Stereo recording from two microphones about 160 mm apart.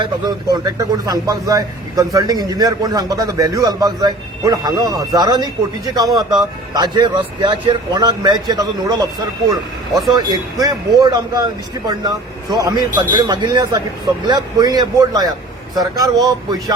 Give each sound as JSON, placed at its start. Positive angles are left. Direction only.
{"t": 0.0, "sound": "speech", "side_deg": -25}
{"t": 10.1, "sound": "speech", "side_deg": -25}